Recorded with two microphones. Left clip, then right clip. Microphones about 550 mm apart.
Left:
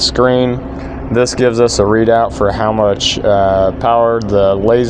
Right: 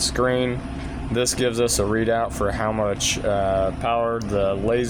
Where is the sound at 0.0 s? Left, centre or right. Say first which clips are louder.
Left 10 dB; right.